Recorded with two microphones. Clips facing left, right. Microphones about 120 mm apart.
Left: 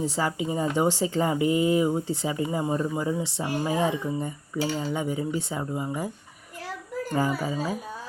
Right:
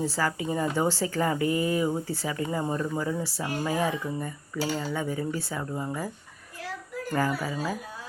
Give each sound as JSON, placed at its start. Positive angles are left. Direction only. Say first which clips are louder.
{"t": 0.0, "sound": "speech", "louder": "left 1 dB", "side_deg": 20}
{"t": 7.1, "sound": "speech", "louder": "left 1 dB", "side_deg": 20}